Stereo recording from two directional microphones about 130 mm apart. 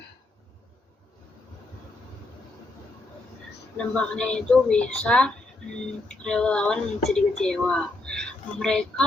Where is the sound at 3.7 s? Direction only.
5° left (ahead or behind).